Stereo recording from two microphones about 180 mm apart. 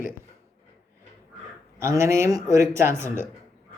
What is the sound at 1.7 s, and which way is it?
A man's voice, 15° right (ahead or behind).